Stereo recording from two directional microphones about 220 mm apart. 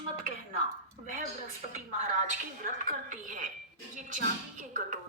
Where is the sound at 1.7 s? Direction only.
35° right (ahead or behind).